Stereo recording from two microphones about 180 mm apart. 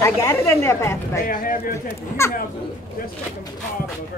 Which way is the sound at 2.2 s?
15° left (ahead or behind).